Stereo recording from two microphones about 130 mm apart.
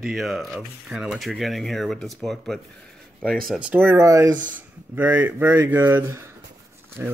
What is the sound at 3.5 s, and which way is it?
Speech, 10° right (ahead or behind).